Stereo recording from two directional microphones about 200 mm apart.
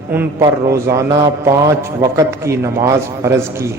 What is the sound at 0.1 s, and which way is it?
A man's voice, 10° right (ahead or behind).